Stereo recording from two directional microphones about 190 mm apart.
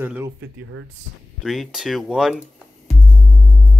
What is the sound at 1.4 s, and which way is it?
Speech, centre (ahead or behind).